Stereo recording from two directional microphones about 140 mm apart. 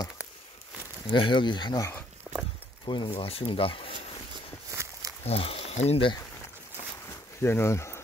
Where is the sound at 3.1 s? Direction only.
45° left (ahead or behind).